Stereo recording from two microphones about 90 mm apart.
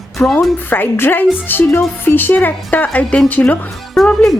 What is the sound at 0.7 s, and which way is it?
A woman's voice, 25° left (ahead or behind).